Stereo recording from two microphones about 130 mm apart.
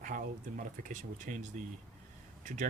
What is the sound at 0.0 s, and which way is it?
Speech, 90° right.